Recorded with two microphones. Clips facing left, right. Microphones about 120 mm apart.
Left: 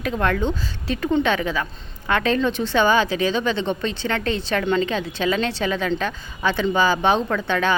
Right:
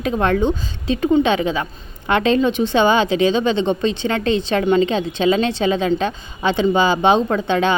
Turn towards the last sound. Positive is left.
turn(degrees=-20)  # may be behind; listen again after turning